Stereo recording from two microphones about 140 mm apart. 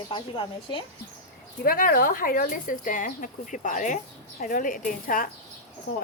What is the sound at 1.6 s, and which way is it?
Speech, 90° left.